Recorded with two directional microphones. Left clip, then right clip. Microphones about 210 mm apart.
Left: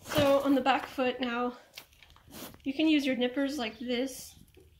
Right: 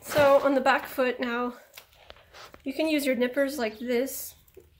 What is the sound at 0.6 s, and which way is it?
Speech, 55° right (ahead or behind).